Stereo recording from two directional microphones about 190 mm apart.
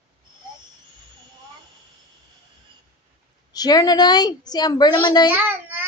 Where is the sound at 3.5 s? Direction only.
20° left (ahead or behind).